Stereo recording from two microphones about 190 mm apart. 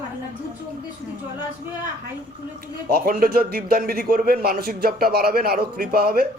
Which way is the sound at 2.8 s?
50° right (ahead or behind).